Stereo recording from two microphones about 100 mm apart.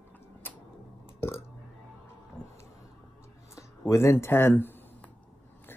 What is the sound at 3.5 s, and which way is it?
Speech, 30° left (ahead or behind).